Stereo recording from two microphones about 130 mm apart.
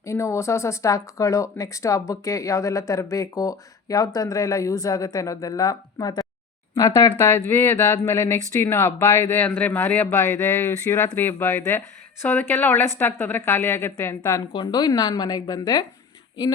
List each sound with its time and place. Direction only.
0.0 s speech: 25° left (ahead or behind)
7.1 s a woman's voice: 15° left (ahead or behind)